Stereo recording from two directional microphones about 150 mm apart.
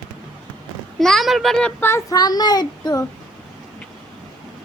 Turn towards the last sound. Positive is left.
turn(degrees=25)  # may be behind; listen again after turning